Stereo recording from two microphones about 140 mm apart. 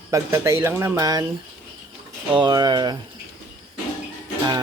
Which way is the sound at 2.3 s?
30° right (ahead or behind).